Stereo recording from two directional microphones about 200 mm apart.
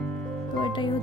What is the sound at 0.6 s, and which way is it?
Speech, 25° left (ahead or behind).